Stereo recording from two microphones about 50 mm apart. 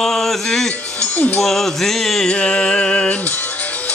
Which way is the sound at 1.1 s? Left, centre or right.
Left.